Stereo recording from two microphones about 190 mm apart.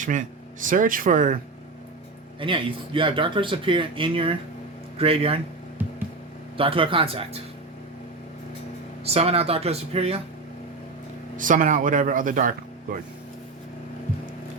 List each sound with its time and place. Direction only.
0.0 s speech: 45° right (ahead or behind)
2.4 s speech: 25° right (ahead or behind)
6.6 s speech: 30° right (ahead or behind)
9.0 s speech: 30° right (ahead or behind)
11.3 s speech: 45° right (ahead or behind)